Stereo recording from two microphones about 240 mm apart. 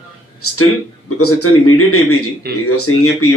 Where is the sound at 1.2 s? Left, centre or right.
Left.